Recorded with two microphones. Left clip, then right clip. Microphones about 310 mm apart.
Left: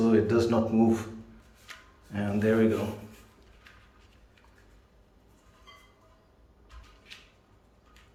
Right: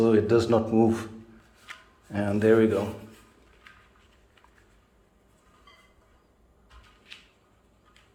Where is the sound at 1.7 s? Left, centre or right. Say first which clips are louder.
Right 3 dB; centre.